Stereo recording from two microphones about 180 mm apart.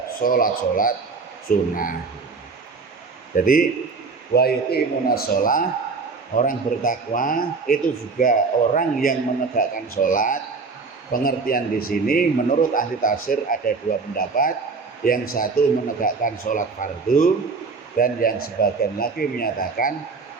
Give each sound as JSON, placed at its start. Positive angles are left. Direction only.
{"t": 0.2, "sound": "a man's voice", "side_deg": 50}
{"t": 3.3, "sound": "a man's voice", "side_deg": 50}